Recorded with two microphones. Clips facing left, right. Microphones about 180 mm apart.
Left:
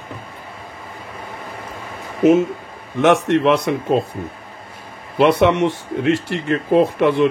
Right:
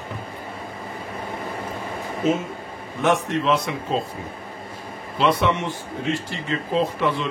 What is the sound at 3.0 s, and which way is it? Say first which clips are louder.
Speech: left 6 dB; 75° left (ahead or behind).